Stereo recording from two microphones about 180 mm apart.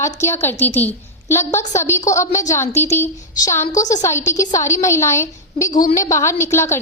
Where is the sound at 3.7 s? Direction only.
45° left (ahead or behind).